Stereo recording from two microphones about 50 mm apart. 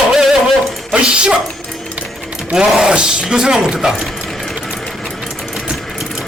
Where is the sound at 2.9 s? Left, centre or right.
Centre.